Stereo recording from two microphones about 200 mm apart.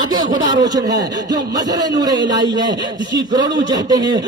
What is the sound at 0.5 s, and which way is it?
Speech, 20° right (ahead or behind).